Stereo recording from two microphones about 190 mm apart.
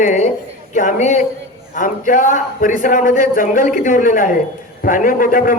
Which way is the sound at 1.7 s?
45° left (ahead or behind).